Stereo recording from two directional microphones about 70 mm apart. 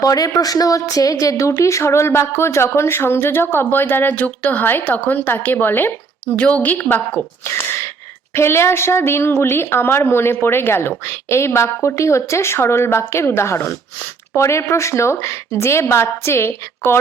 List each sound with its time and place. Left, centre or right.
0.0 s a woman's voice: left
6.3 s a woman's voice: centre
7.4 s gasp: left
8.3 s a woman's voice: left